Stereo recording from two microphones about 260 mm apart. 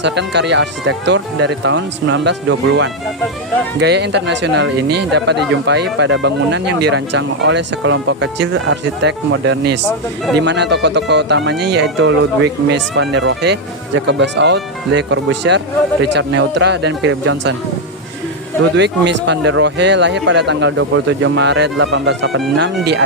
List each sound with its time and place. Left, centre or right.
0.0 s speech: right
18.8 s speech: right